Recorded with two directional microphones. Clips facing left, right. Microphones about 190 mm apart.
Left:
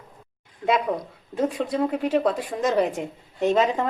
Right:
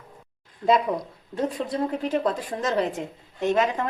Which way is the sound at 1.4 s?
10° left (ahead or behind).